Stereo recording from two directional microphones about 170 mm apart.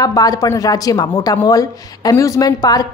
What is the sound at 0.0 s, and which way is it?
Speech, 20° left (ahead or behind).